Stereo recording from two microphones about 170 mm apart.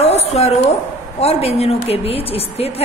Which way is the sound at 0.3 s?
40° left (ahead or behind).